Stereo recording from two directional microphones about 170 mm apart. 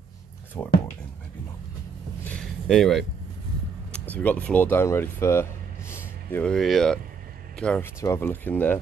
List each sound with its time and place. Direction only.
0.6 s speech: 10° left (ahead or behind)
2.2 s a sound: 5° left (ahead or behind)
4.0 s speech: 10° left (ahead or behind)